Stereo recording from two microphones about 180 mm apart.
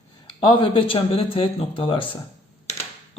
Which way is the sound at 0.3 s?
30° left (ahead or behind).